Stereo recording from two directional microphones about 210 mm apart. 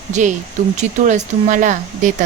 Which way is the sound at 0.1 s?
35° right (ahead or behind).